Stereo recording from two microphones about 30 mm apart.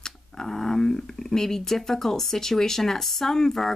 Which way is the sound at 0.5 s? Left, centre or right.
Centre.